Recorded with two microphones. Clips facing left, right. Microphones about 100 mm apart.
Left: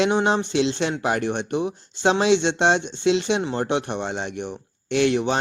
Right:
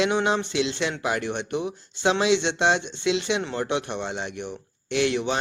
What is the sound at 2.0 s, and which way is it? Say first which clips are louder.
Speech: left 3 dB; 30° left (ahead or behind).